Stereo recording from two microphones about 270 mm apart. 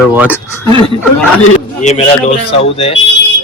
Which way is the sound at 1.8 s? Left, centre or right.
Left.